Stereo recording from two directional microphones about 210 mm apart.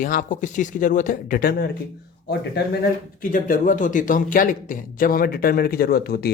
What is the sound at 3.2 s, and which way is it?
A man's voice, 40° left (ahead or behind).